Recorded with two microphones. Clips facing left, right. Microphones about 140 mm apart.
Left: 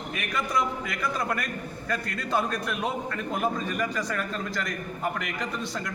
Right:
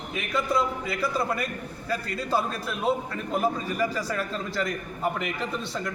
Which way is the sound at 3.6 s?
30° right (ahead or behind).